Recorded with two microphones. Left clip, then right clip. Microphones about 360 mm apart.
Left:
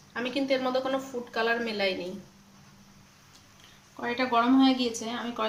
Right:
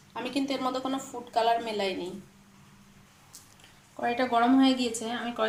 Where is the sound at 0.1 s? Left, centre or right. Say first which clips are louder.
Left 3 dB; centre.